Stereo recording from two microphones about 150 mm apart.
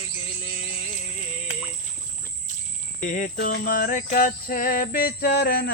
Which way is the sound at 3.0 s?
60° left (ahead or behind).